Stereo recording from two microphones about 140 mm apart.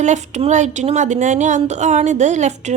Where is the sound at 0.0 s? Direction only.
55° right (ahead or behind).